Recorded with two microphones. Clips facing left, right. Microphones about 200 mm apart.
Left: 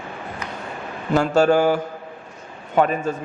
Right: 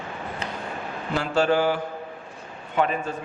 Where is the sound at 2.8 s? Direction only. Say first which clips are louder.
Left 5 dB; 40° left (ahead or behind).